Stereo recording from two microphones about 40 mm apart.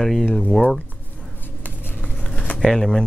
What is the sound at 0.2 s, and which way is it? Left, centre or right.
Speech, centre.